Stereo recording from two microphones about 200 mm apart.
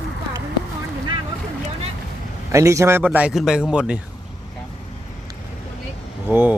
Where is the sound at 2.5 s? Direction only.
15° right (ahead or behind).